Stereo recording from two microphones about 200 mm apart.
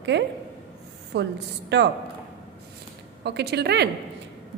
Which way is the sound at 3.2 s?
55° right (ahead or behind).